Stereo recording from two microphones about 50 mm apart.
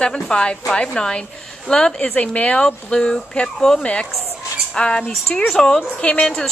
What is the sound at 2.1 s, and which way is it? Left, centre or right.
Speech, left.